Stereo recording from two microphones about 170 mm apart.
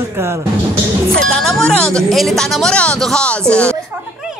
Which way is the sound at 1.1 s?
5° left (ahead or behind).